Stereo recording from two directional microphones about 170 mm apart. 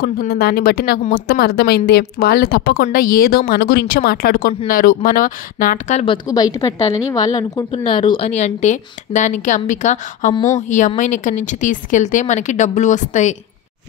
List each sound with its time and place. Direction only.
0.2 s a woman's voice: 65° left (ahead or behind); by 6.0 s 50° left (ahead or behind)
6.0 s a woman's voice: 20° left (ahead or behind); by 10.3 s 45° left (ahead or behind)
10.3 s a woman's voice: 20° left (ahead or behind)
11.0 s speech: 45° left (ahead or behind)